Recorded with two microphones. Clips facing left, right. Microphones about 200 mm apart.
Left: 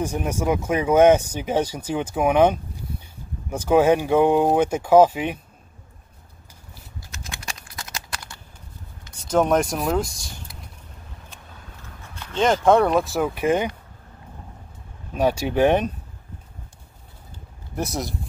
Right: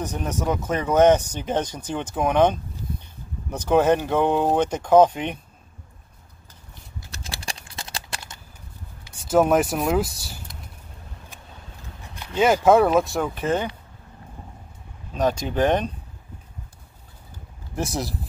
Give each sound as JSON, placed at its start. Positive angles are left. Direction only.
{"t": 0.0, "sound": "speech", "side_deg": 10}
{"t": 7.1, "sound": "a sound", "side_deg": -35}
{"t": 9.1, "sound": "speech", "side_deg": -5}
{"t": 12.0, "sound": "speech", "side_deg": -15}
{"t": 15.1, "sound": "speech", "side_deg": 10}
{"t": 17.7, "sound": "speech", "side_deg": 0}